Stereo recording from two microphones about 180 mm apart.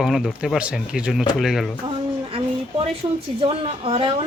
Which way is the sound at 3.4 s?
30° right (ahead or behind).